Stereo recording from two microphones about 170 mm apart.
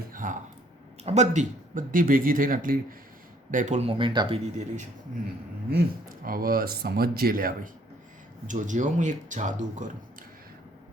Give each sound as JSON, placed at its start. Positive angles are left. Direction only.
{"t": 0.1, "sound": "a sound", "side_deg": -50}
{"t": 1.0, "sound": "speech", "side_deg": -40}
{"t": 4.5, "sound": "speech", "side_deg": -45}
{"t": 5.7, "sound": "speech", "side_deg": -55}